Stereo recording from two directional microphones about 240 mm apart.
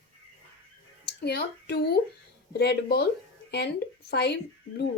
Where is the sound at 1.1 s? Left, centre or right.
Left.